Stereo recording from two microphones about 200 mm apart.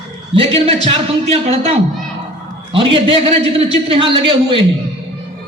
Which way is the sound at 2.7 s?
25° right (ahead or behind).